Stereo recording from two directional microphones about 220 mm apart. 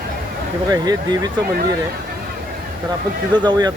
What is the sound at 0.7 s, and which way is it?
Speech, 20° right (ahead or behind).